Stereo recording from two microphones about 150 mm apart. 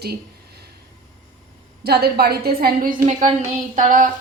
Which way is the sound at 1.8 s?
90° right.